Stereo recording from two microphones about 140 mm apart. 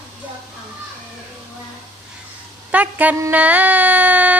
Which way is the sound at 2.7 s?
10° right (ahead or behind).